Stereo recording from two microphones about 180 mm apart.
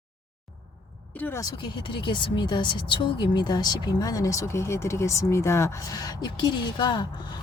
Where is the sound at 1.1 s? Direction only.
10° left (ahead or behind).